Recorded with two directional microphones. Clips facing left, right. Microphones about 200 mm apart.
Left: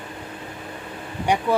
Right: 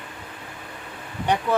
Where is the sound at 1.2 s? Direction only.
10° left (ahead or behind).